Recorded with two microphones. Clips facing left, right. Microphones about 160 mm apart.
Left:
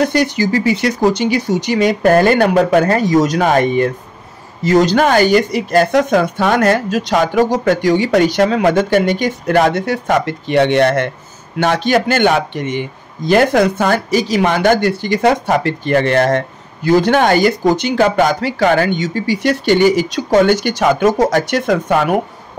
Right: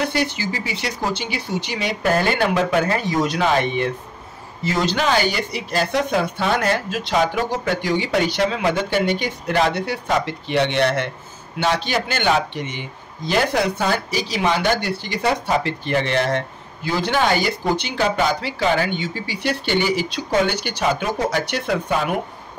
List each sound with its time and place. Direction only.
0.0 s speech: 45° left (ahead or behind)
20.8 s speech: 90° left
21.3 s speech: 45° left (ahead or behind)
21.8 s speech: 75° left (ahead or behind)